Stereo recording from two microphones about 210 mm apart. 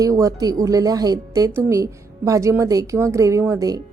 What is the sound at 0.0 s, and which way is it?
A woman's voice, 15° right (ahead or behind).